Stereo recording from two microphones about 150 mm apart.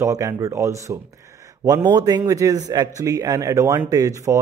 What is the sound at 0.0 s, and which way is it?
A man's voice, 20° right (ahead or behind).